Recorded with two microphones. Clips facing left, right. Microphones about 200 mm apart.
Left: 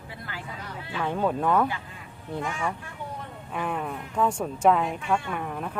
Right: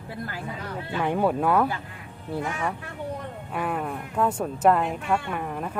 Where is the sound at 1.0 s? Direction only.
15° right (ahead or behind).